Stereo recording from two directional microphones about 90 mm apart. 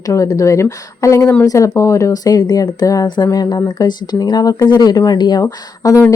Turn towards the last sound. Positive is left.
turn(degrees=40)  # may be behind; listen again after turning